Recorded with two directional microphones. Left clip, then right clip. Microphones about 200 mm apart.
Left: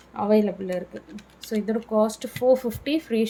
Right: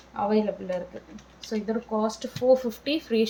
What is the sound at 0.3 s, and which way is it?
A woman's voice, 30° left (ahead or behind).